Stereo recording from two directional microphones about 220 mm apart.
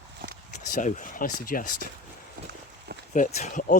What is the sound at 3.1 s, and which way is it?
Speech, 35° left (ahead or behind).